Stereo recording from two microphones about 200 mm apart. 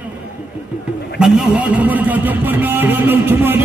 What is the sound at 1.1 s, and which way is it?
Music, 5° right (ahead or behind).